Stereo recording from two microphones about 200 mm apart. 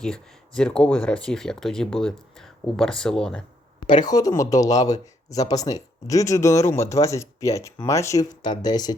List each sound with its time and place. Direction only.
0.0 s speech: 5° left (ahead or behind)
3.8 s speech: 20° left (ahead or behind)